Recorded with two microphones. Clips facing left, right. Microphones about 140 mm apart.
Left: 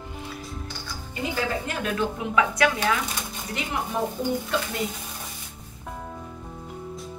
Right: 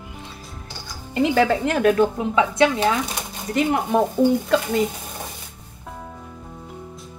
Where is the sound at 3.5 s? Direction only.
40° right (ahead or behind).